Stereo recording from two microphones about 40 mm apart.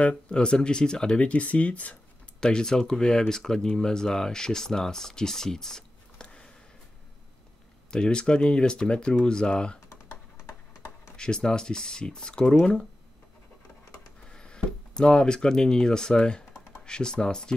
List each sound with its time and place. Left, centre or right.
0.1 s speech: left
1.2 s speech: left
2.4 s speech: centre
7.9 s speech: left
11.1 s speech: centre
14.3 s speech: left